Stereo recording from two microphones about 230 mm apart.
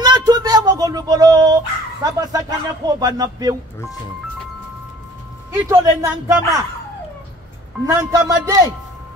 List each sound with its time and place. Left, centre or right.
0.0 s a sound: centre
2.1 s speech: centre
5.5 s speech: centre
7.8 s speech: centre